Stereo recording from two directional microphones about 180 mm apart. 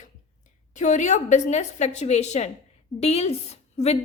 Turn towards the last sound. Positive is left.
turn(degrees=35)  # may be behind; listen again after turning